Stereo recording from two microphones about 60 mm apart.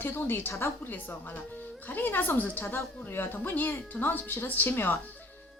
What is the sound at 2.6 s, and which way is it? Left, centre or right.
Speech, left.